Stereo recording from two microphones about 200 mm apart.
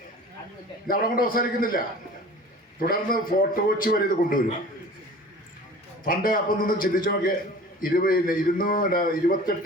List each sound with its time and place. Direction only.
0.9 s a man's voice: 45° left (ahead or behind)
2.8 s a man's voice: 45° left (ahead or behind)
6.1 s a man's voice: 45° left (ahead or behind)